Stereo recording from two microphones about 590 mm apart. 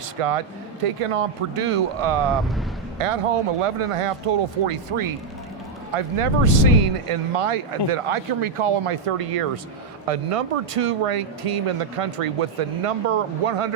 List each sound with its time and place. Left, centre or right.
0.2 s speech: right